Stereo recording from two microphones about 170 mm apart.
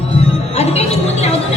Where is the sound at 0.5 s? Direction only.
40° left (ahead or behind).